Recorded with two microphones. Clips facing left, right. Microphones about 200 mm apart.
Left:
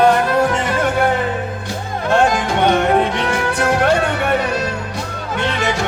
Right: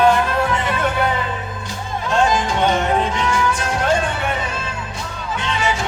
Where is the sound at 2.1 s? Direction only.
60° left (ahead or behind).